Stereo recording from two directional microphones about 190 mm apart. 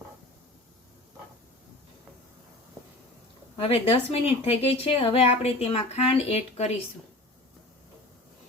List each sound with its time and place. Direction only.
3.6 s speech: 30° left (ahead or behind)